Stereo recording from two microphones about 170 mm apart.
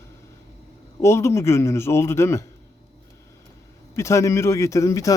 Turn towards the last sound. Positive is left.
turn(degrees=20)  # may be behind; listen again after turning